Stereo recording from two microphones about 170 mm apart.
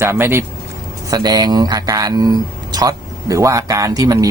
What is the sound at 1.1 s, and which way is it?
A man's voice, 25° right (ahead or behind).